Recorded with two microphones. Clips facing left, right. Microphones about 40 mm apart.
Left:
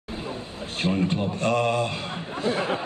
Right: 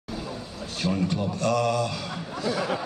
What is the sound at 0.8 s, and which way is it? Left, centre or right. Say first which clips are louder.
A man's voice: left 2 dB; left.